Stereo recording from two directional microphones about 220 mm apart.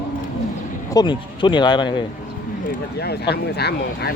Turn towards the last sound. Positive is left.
turn(degrees=45)  # may be behind; listen again after turning